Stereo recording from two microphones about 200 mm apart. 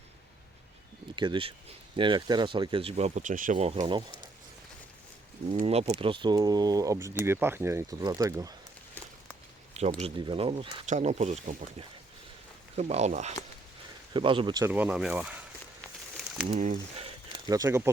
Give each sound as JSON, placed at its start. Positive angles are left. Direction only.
{"t": 1.1, "sound": "speech", "side_deg": -25}
{"t": 5.5, "sound": "speech", "side_deg": -30}
{"t": 10.0, "sound": "speech", "side_deg": -25}
{"t": 14.7, "sound": "speech", "side_deg": -10}
{"t": 15.8, "sound": "a sound", "side_deg": 0}
{"t": 16.6, "sound": "speech", "side_deg": -40}
{"t": 17.5, "sound": "speech", "side_deg": -15}